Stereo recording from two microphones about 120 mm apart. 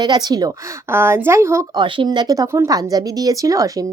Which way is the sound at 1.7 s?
40° right (ahead or behind).